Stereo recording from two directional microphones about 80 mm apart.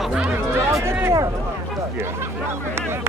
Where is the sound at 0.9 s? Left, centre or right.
Right.